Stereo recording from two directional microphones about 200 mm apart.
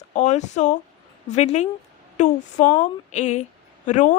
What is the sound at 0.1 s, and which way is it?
A woman's voice, 35° left (ahead or behind).